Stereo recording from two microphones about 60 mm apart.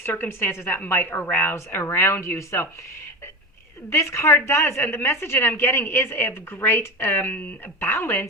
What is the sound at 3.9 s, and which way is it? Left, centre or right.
A woman's voice, left.